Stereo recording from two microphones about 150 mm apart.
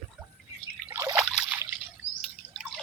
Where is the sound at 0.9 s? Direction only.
20° right (ahead or behind).